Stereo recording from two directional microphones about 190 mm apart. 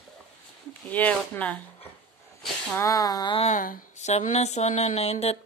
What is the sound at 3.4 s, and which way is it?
Speech, 40° left (ahead or behind).